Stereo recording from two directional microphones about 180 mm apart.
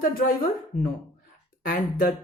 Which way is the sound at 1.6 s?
50° left (ahead or behind).